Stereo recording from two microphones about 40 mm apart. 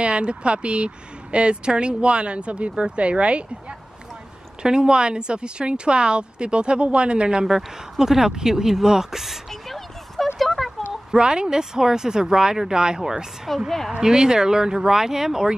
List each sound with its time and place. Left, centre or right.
0.0 s speech: right
4.6 s speech: centre
9.5 s a sound: centre
11.1 s speech: right
13.5 s a woman's voice: centre
14.0 s speech: centre